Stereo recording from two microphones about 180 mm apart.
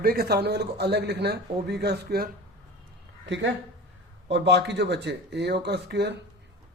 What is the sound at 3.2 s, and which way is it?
Speech, 80° right.